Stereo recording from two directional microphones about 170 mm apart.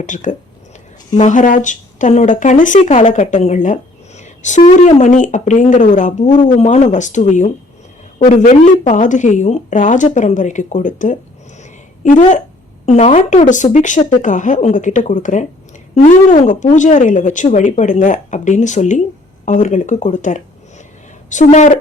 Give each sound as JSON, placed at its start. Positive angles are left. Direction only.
{"t": 0.0, "sound": "speech", "side_deg": 45}
{"t": 4.2, "sound": "a sound", "side_deg": 45}
{"t": 4.9, "sound": "speech", "side_deg": 45}